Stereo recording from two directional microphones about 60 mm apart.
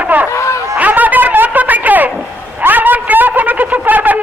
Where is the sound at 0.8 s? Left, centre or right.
Right.